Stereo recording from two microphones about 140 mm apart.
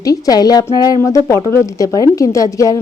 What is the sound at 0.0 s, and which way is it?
A woman's voice, 25° left (ahead or behind).